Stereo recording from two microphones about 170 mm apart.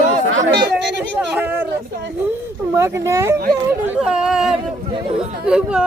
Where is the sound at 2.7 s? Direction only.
15° right (ahead or behind).